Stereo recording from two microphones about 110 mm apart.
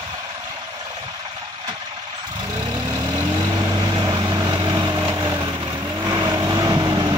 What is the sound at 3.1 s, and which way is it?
Vehicle, 35° right (ahead or behind).